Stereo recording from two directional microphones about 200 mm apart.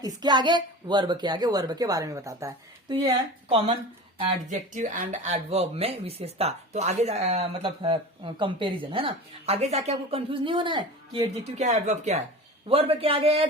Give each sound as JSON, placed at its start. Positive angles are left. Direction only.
{"t": 0.0, "sound": "speech", "side_deg": -20}
{"t": 4.2, "sound": "speech", "side_deg": -40}
{"t": 11.4, "sound": "speech", "side_deg": -35}